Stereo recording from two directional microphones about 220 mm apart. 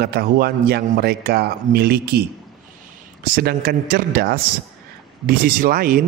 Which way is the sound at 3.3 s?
45° right (ahead or behind).